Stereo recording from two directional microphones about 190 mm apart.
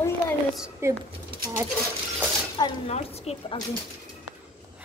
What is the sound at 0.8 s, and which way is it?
Speech, 15° right (ahead or behind).